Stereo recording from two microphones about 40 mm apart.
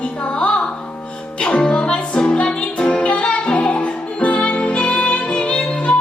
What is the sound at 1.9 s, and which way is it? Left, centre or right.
Music, left.